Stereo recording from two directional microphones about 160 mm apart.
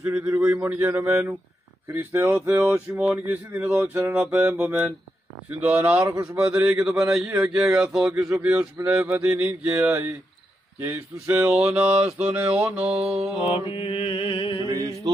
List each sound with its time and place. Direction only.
0.0 s speech: 10° right (ahead or behind)
6.5 s speech: 5° right (ahead or behind)
9.3 s mantra: 20° right (ahead or behind)
9.8 s speech: 15° right (ahead or behind)
11.4 s speech: 5° right (ahead or behind)
13.0 s mantra: 40° right (ahead or behind)
13.4 s mantra: 35° left (ahead or behind)